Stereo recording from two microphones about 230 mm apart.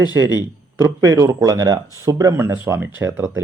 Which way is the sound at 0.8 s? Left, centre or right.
Centre.